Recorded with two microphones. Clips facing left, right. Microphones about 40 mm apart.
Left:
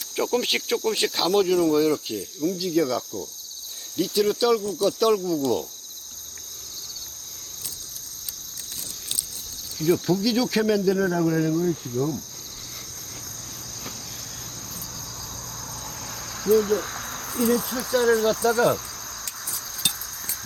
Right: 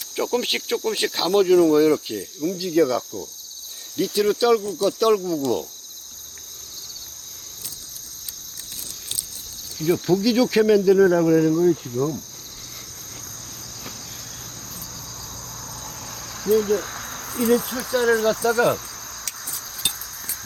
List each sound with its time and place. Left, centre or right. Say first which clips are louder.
0.2 s cricket: right 1 dB; centre
1.5 s cricket: right 5 dB; right
9.7 s cricket: right 2 dB; centre
16.4 s cricket: right 1 dB; centre